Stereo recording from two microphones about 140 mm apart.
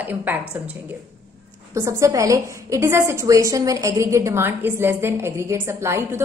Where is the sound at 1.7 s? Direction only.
20° right (ahead or behind).